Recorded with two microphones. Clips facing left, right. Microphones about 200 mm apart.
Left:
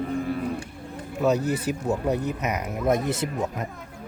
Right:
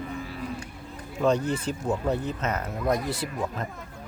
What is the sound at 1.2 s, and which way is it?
Speech, 5° left (ahead or behind).